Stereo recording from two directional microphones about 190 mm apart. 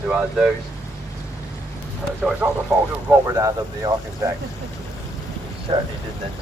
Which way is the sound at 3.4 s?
15° right (ahead or behind).